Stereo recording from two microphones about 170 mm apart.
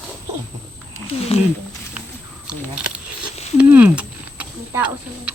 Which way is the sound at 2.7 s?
5° right (ahead or behind).